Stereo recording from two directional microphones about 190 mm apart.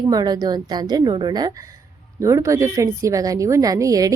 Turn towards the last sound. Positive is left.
turn(degrees=-15)  # may be behind; listen again after turning